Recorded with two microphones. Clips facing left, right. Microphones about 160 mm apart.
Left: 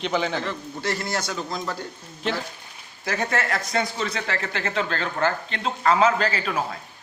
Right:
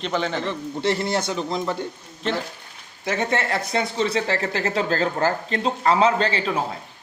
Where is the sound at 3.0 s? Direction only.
25° right (ahead or behind).